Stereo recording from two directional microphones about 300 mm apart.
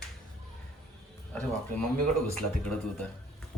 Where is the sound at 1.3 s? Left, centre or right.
Centre.